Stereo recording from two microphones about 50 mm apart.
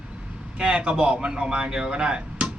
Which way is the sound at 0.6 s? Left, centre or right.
Right.